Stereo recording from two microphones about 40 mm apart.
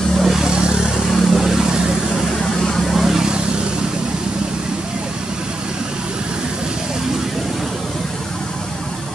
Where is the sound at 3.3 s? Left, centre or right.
Right; by 8.1 s centre.